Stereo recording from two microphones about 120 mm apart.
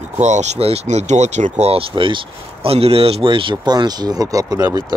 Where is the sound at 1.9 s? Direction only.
45° right (ahead or behind).